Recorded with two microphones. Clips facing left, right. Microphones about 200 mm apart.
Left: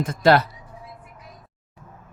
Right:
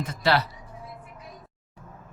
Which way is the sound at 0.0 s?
50° left (ahead or behind).